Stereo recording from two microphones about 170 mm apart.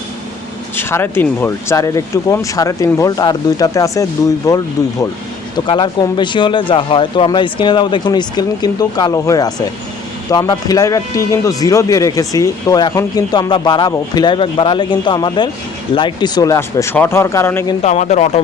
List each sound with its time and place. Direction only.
0.8 s speech: 15° left (ahead or behind)
17.8 s speech: 40° left (ahead or behind)